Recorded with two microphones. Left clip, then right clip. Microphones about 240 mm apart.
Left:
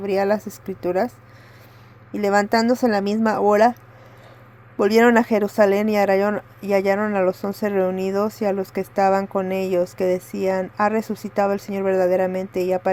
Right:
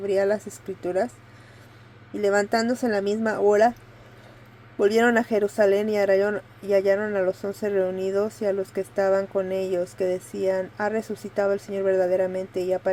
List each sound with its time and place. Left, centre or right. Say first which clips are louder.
0.0 s speech: left 2 dB; left
2.1 s speech: left 3 dB; left
4.8 s speech: left 4 dB; left